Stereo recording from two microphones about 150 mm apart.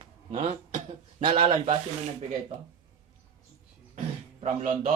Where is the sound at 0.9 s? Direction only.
35° right (ahead or behind).